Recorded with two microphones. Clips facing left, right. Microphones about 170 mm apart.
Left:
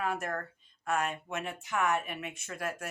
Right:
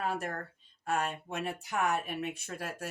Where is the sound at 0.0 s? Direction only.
30° right (ahead or behind).